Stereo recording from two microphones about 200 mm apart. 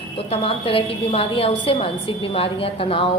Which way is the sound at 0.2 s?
30° left (ahead or behind).